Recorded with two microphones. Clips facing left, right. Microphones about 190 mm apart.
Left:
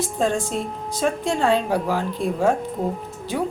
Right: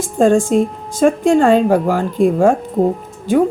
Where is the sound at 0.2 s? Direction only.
50° right (ahead or behind).